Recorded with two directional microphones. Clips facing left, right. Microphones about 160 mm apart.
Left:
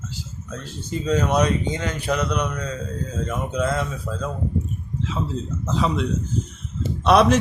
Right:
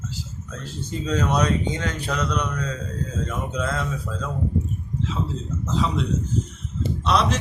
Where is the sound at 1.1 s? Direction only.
10° left (ahead or behind).